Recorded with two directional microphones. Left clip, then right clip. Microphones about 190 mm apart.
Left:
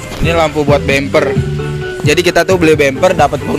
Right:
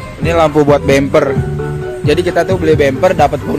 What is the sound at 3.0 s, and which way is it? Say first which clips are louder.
Speech: even; centre (ahead or behind).